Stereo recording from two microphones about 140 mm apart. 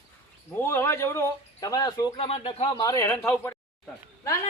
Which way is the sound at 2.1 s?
40° left (ahead or behind).